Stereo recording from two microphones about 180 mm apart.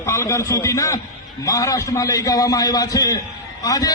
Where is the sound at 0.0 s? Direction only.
15° left (ahead or behind).